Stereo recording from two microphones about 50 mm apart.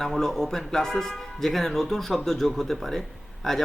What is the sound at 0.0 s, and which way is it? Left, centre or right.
Speech, centre.